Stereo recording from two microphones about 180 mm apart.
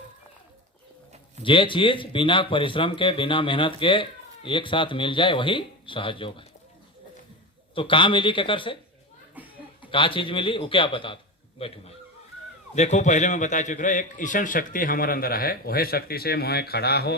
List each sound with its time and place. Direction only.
1.4 s speech: 30° left (ahead or behind)
7.8 s speech: 30° left (ahead or behind)
9.4 s chuckle: 10° right (ahead or behind)
9.8 s a man's voice: 30° left (ahead or behind); by 17.2 s 60° left (ahead or behind)